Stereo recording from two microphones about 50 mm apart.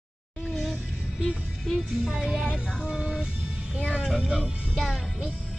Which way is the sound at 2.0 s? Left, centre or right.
Centre.